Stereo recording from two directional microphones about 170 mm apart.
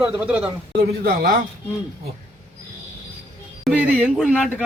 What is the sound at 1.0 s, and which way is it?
Speech, 60° right (ahead or behind).